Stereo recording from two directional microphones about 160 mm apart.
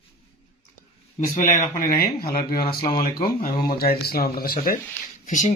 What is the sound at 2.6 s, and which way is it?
Speech, 25° left (ahead or behind).